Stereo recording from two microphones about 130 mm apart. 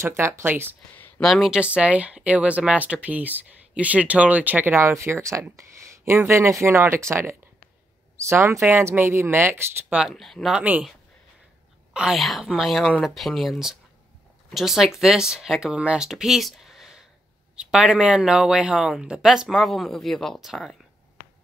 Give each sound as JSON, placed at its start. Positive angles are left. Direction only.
{"t": 0.0, "sound": "speech", "side_deg": -20}
{"t": 0.9, "sound": "a sound", "side_deg": 15}
{"t": 1.2, "sound": "speech", "side_deg": 0}
{"t": 9.9, "sound": "speech", "side_deg": 0}
{"t": 10.6, "sound": "speech", "side_deg": -10}
{"t": 11.9, "sound": "speech", "side_deg": -5}